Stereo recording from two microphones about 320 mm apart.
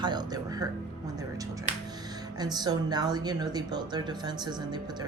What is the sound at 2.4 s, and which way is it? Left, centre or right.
Speech, centre.